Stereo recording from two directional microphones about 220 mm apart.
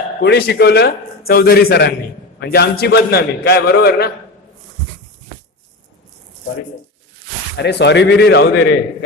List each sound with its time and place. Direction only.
0.2 s a man's voice: 45° left (ahead or behind)
7.5 s a man's voice: 50° left (ahead or behind)